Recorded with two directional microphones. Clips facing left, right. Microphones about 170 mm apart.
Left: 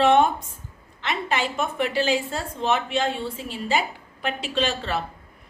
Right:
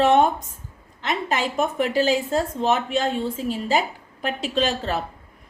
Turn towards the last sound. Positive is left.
turn(degrees=-40)  # may be behind; listen again after turning